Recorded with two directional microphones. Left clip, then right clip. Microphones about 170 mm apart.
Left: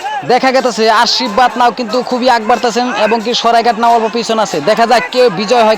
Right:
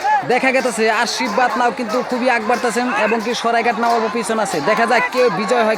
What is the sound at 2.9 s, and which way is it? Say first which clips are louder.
Speech: left 5 dB; 45° left (ahead or behind).